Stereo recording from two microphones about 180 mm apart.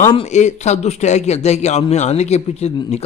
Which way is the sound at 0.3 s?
40° left (ahead or behind).